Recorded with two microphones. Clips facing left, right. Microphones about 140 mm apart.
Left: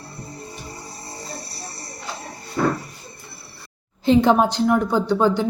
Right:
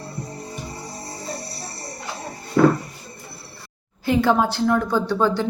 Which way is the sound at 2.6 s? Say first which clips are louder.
Right 6 dB; 75° right (ahead or behind).